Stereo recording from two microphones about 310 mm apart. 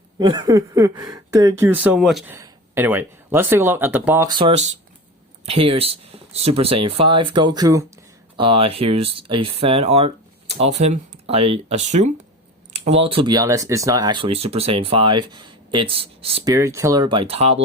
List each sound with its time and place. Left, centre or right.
0.2 s speech: centre